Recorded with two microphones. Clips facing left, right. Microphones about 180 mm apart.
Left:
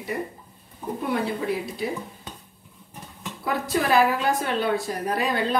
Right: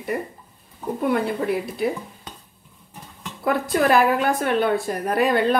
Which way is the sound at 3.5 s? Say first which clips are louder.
Right 4 dB; 55° right (ahead or behind).